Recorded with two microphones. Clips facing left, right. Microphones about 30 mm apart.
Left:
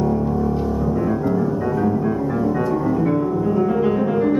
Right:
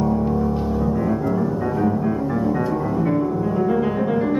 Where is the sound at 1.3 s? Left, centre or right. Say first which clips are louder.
Left 1 dB; centre.